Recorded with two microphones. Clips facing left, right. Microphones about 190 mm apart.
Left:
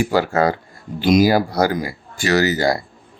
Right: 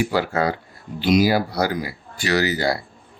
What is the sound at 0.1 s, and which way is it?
Speech, 45° left (ahead or behind).